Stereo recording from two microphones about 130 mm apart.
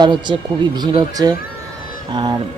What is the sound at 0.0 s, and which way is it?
Speech, 35° right (ahead or behind).